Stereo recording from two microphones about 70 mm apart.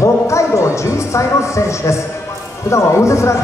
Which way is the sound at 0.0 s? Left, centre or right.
Left.